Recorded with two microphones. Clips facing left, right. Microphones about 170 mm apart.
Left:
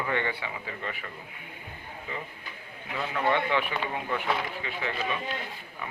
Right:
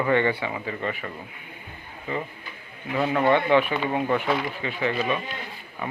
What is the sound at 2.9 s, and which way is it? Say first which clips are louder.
Speech: right 7 dB; 55° right (ahead or behind).